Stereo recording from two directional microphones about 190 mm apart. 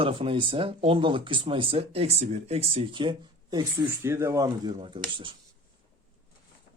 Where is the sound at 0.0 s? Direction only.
30° right (ahead or behind).